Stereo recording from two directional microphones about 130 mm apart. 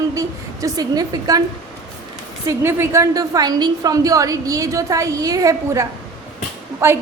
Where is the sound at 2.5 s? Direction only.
20° right (ahead or behind).